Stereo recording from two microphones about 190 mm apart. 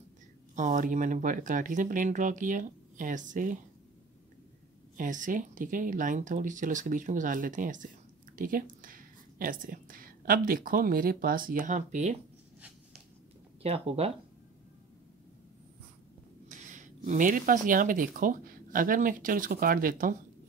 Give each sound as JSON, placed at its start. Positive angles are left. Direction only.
{"t": 0.6, "sound": "speech", "side_deg": -45}
{"t": 4.9, "sound": "speech", "side_deg": -45}
{"t": 13.6, "sound": "speech", "side_deg": -30}
{"t": 16.4, "sound": "speech", "side_deg": -40}